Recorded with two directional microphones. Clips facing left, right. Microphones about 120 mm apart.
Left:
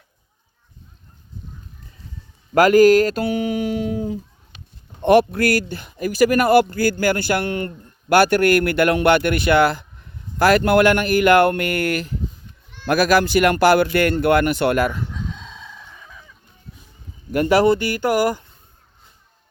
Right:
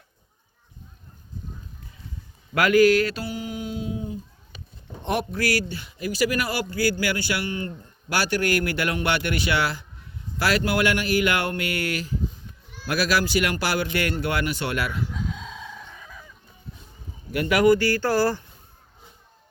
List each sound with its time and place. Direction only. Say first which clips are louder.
2.6 s speech: left 6 dB; 40° left (ahead or behind)
3.2 s a sound: left 10 dB; 65° left (ahead or behind)
5.0 s a man's voice: left 11 dB; 65° left (ahead or behind); by 15.0 s 45° left (ahead or behind)
15.1 s chicken: even; 5° right (ahead or behind)
17.3 s speech: left 3 dB; 40° left (ahead or behind)
17.7 s speech: left 2 dB; 20° left (ahead or behind)